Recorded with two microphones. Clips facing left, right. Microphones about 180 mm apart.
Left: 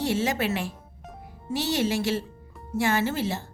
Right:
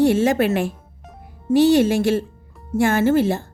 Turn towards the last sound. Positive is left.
turn(degrees=-50)  # may be behind; listen again after turning